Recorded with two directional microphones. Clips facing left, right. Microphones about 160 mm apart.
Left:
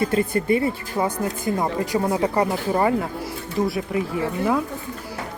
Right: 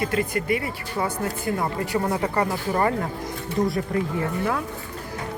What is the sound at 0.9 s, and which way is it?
Speech, 20° left (ahead or behind).